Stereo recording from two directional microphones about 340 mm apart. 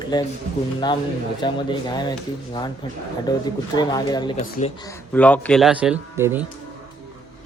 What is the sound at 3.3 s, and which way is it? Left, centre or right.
Speech, centre.